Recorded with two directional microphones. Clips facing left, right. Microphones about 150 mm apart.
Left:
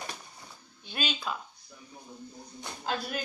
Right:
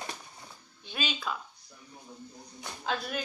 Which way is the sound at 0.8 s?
Centre (ahead or behind).